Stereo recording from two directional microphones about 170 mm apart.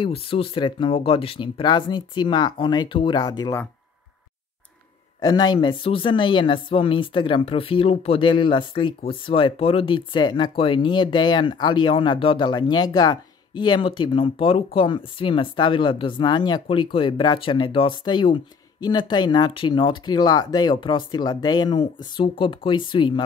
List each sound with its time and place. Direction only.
0.0 s speech: 35° left (ahead or behind)
5.2 s speech: 25° left (ahead or behind)